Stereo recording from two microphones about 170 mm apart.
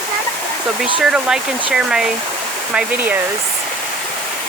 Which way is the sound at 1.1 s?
5° right (ahead or behind).